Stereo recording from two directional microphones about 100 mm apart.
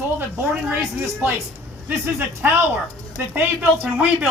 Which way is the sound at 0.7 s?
25° right (ahead or behind).